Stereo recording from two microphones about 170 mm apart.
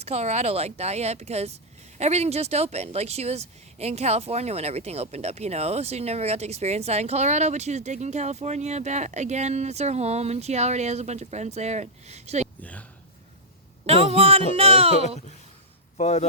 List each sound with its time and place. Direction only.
0.0 s speech: 40° right (ahead or behind)
12.5 s speech: 10° left (ahead or behind)
13.8 s speech: 35° right (ahead or behind)
16.0 s a man's voice: 40° left (ahead or behind)